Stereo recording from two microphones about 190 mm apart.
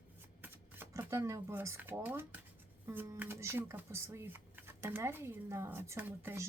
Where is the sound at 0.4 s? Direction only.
10° right (ahead or behind).